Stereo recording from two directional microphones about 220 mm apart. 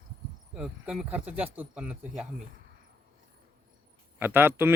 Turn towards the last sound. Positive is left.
turn(degrees=-10)  # may be behind; listen again after turning